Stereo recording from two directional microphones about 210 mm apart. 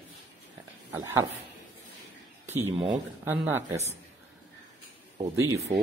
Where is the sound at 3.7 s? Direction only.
30° right (ahead or behind).